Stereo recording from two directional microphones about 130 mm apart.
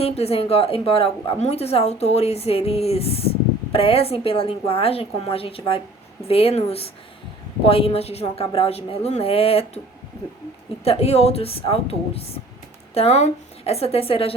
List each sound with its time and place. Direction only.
0.0 s a woman's voice: 50° left (ahead or behind)
10.8 s a woman's voice: 55° left (ahead or behind)